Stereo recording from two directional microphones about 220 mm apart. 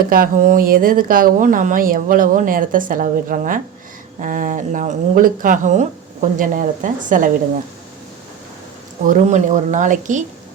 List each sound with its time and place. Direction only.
0.1 s speech: 40° right (ahead or behind)
9.0 s speech: 35° right (ahead or behind)